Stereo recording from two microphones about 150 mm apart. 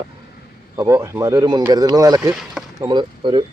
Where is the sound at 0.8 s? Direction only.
20° right (ahead or behind).